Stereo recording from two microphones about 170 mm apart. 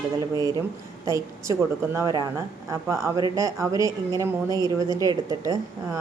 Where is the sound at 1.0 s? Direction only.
15° right (ahead or behind).